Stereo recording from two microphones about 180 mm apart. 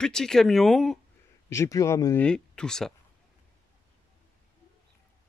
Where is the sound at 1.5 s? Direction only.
15° left (ahead or behind).